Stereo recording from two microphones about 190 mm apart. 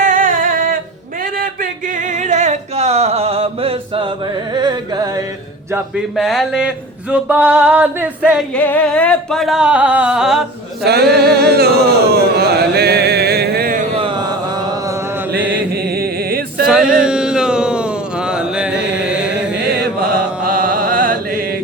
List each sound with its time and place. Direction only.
0.0 s a sound: 45° right (ahead or behind)
1.2 s male singing: 45° right (ahead or behind); by 4.1 s 30° right (ahead or behind)
4.5 s carnatic music: 20° right (ahead or behind)
5.7 s speech: centre (ahead or behind)
8.5 s speech: 10° left (ahead or behind)
10.8 s a sound: 55° right (ahead or behind)
14.0 s mantra: 25° right (ahead or behind)
15.7 s chant: 55° right (ahead or behind)
16.6 s a sound: 5° right (ahead or behind)
19.8 s chant: 55° right (ahead or behind)